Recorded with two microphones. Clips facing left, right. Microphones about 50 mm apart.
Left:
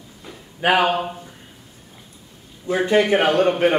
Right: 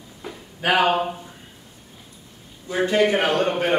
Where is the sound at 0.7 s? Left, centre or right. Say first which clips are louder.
Right 3 dB; centre.